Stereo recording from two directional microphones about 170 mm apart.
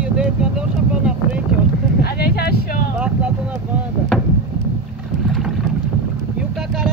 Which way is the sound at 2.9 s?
5° right (ahead or behind).